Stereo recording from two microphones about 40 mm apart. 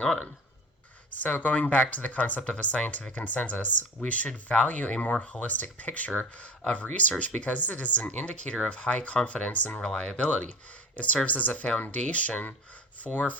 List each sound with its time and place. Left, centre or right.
1.2 s speech: left
9.8 s speech: centre
10.1 s speech: left